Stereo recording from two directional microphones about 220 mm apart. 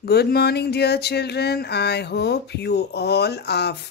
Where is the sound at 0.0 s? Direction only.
45° left (ahead or behind).